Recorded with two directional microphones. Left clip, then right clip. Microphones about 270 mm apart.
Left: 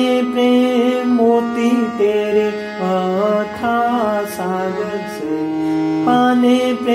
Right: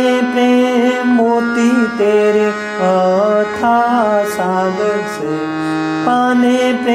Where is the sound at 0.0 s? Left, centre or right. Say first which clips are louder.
Right 2 dB; right.